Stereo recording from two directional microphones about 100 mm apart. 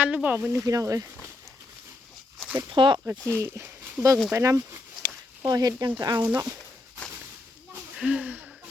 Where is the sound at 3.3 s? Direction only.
30° right (ahead or behind).